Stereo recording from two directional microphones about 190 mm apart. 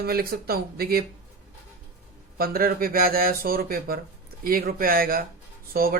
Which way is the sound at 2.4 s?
50° right (ahead or behind).